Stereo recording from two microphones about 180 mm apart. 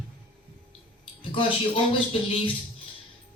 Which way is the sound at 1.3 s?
30° left (ahead or behind).